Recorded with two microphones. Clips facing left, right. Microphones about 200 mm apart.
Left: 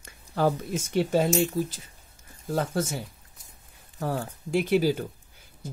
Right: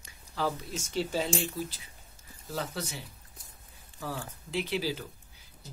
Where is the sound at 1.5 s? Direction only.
45° left (ahead or behind).